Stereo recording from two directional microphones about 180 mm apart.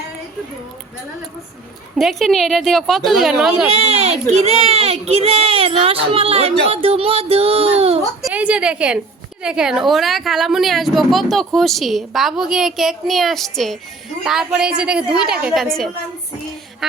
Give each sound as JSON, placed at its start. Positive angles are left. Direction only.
{"t": 2.0, "sound": "a woman's voice", "side_deg": 0}
{"t": 3.7, "sound": "a child's voice", "side_deg": -35}
{"t": 8.2, "sound": "a woman's voice", "side_deg": -10}